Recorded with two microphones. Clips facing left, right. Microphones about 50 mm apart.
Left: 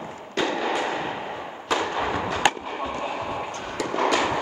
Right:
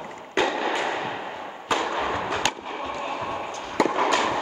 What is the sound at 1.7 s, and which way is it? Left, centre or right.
Music, centre.